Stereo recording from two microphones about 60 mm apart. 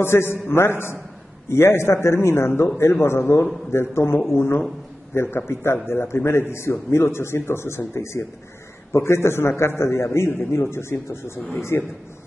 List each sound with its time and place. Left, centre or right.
0.0 s a man's voice: left